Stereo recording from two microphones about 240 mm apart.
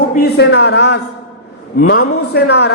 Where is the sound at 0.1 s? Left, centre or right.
Left.